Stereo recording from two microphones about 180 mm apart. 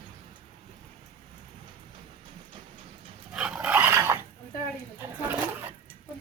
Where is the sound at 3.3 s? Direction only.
5° right (ahead or behind).